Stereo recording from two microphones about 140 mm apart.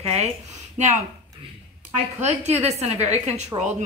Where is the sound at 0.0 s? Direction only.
50° right (ahead or behind).